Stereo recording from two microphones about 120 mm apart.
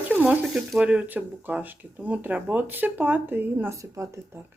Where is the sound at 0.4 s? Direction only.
Centre (ahead or behind).